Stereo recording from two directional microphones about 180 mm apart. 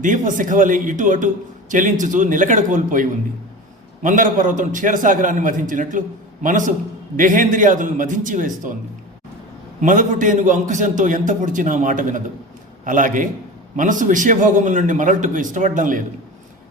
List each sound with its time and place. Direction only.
0.0 s a man's voice: 45° right (ahead or behind)
9.8 s a man's voice: 45° right (ahead or behind)